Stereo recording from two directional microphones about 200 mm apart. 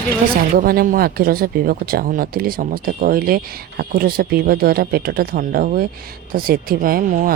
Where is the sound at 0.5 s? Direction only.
45° right (ahead or behind).